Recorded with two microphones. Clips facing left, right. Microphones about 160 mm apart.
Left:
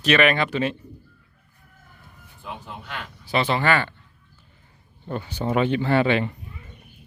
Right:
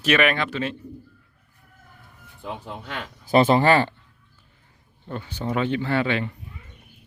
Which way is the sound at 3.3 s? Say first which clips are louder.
Right 5 dB; 45° right (ahead or behind).